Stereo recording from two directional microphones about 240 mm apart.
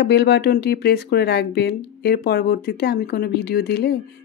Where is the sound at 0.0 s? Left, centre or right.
Left.